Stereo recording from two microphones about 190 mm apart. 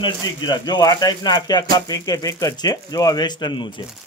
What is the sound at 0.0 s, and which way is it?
Speech, 20° left (ahead or behind).